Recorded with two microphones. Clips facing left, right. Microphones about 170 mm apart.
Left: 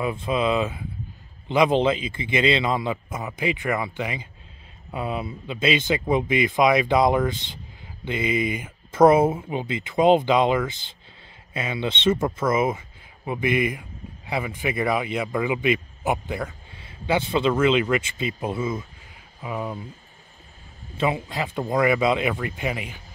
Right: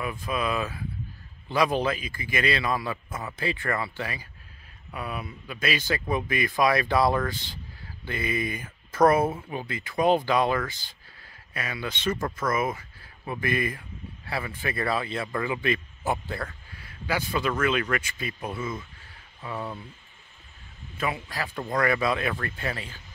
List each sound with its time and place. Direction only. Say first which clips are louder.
0.0 s speech: left 6 dB; 25° left (ahead or behind)
21.3 s speech: left 5 dB; 20° left (ahead or behind)